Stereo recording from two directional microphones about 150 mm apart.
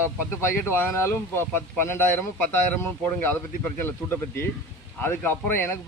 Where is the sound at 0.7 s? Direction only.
15° left (ahead or behind).